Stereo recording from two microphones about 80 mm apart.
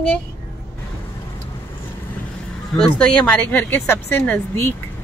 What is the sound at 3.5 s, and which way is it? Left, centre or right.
Speech, left.